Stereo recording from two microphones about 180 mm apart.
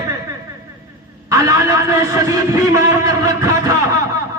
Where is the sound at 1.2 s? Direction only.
15° right (ahead or behind).